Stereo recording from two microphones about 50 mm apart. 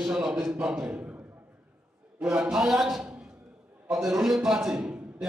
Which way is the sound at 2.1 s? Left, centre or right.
Centre.